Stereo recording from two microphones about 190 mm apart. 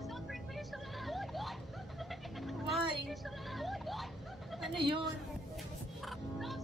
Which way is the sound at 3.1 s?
Centre (ahead or behind).